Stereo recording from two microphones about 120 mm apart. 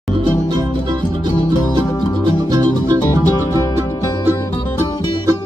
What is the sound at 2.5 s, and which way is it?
Music, 35° right (ahead or behind).